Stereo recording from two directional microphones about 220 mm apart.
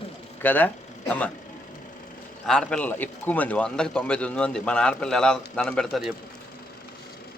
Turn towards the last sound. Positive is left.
turn(degrees=0)  # may be behind; listen again after turning